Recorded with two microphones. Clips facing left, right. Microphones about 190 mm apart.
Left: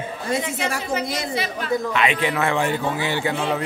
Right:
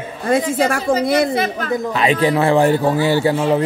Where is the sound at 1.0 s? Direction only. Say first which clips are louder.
Right 10 dB; 60° right (ahead or behind).